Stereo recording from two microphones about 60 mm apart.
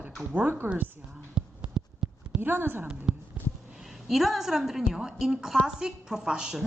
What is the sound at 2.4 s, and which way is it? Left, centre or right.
Speech, right.